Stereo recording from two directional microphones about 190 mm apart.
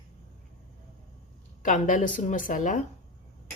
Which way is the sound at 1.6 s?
45° left (ahead or behind).